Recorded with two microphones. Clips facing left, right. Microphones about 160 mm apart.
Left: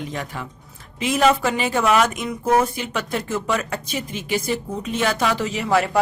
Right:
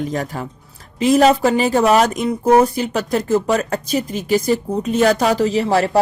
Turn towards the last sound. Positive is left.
turn(degrees=-35)  # may be behind; listen again after turning